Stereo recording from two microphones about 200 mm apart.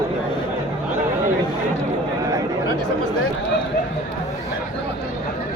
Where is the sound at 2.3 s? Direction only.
20° right (ahead or behind).